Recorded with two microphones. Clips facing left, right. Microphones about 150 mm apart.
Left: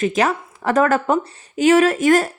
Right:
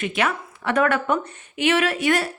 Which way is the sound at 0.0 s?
40° left (ahead or behind).